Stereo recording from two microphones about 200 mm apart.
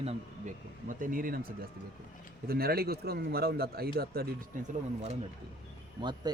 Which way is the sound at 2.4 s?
50° right (ahead or behind).